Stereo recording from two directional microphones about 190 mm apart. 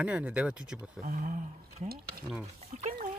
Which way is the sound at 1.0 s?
40° right (ahead or behind).